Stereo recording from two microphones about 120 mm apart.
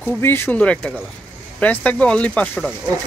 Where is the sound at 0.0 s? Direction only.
20° left (ahead or behind).